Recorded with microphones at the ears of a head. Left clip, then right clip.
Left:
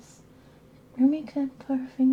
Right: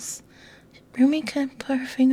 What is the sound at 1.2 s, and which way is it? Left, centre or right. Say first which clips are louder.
Speech: right 4 dB; right.